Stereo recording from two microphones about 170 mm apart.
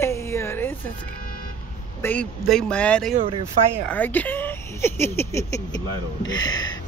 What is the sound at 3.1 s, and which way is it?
Speech, 35° right (ahead or behind).